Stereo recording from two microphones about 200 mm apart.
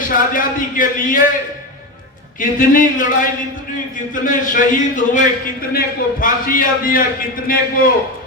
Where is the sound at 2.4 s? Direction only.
40° left (ahead or behind).